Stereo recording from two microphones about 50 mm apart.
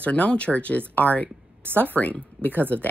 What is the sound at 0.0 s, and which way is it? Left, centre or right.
A woman's voice, left.